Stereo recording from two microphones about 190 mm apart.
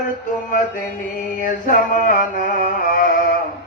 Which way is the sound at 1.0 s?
45° left (ahead or behind).